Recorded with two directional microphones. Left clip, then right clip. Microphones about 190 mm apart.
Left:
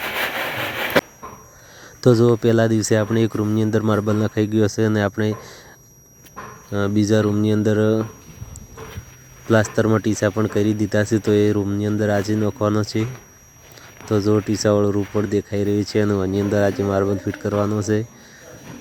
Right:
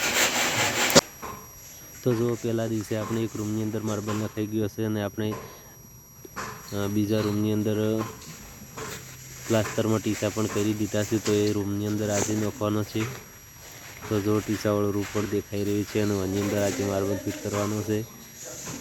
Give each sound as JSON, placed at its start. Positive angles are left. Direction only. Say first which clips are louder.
{"t": 2.0, "sound": "speech", "louder": "left 11 dB", "side_deg": 55}
{"t": 6.7, "sound": "speech", "louder": "left 8 dB", "side_deg": 55}
{"t": 9.5, "sound": "speech", "louder": "left 8 dB", "side_deg": 50}
{"t": 14.1, "sound": "speech", "louder": "left 7 dB", "side_deg": 45}